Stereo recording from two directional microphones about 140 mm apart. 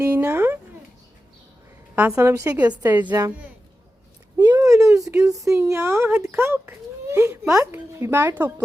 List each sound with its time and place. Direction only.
0.0 s a sound: 20° right (ahead or behind)
2.0 s speech: 15° right (ahead or behind)
4.4 s speech: 20° right (ahead or behind)